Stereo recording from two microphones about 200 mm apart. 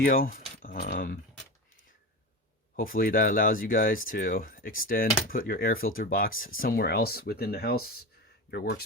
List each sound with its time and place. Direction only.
0.0 s speech: 45° left (ahead or behind)
2.7 s speech: 45° left (ahead or behind)